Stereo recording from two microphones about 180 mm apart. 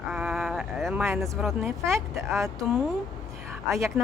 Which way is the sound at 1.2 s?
Centre (ahead or behind).